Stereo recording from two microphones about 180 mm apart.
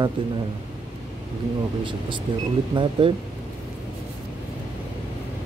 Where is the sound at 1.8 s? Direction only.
25° right (ahead or behind).